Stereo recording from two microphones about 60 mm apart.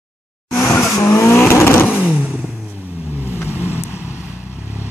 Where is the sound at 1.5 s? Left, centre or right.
Left.